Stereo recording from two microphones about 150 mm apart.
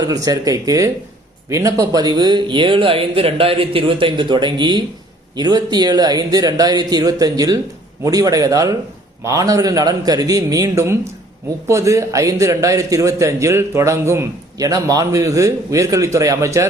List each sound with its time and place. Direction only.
0.0 s a man's voice: 25° right (ahead or behind)